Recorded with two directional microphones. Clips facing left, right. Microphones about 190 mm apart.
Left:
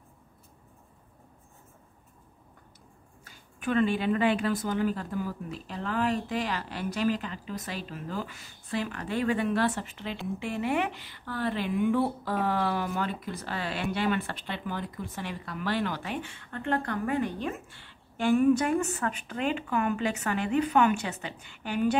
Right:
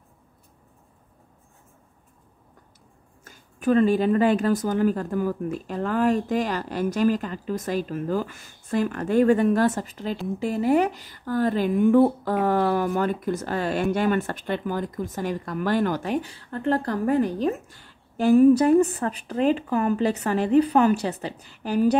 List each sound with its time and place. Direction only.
3.3 s speech: 40° right (ahead or behind)